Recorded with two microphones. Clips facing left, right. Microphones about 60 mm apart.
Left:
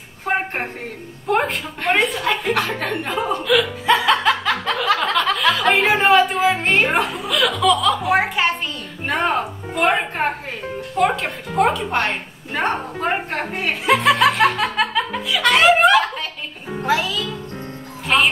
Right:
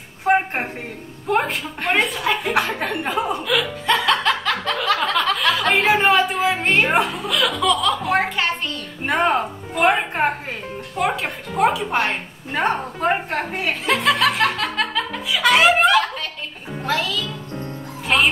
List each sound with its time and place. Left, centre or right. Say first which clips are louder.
0.2 s a sound: right 4 dB; centre
1.2 s a woman's voice: left 1 dB; centre
9.4 s music: right 1 dB; centre
11.0 s a woman's voice: left 3 dB; centre